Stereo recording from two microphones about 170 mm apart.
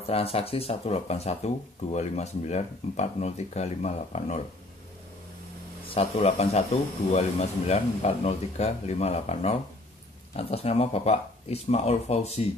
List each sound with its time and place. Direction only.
0.0 s speech: 35° left (ahead or behind)
5.9 s speech: 40° left (ahead or behind)